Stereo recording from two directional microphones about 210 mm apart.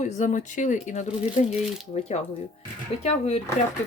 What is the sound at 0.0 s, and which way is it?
Speech, 35° left (ahead or behind).